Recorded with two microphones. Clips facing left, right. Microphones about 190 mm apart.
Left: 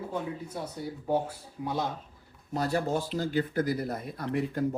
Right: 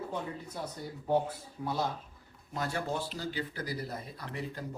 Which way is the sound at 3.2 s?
50° left (ahead or behind).